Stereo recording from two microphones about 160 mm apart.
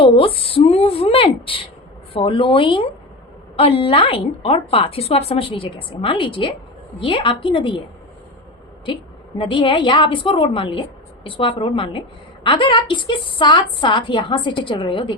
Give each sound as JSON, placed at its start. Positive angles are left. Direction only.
{"t": 0.0, "sound": "a woman's voice", "side_deg": 35}
{"t": 9.4, "sound": "a woman's voice", "side_deg": 30}